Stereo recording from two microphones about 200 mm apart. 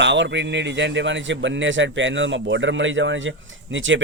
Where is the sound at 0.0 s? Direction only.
60° right (ahead or behind).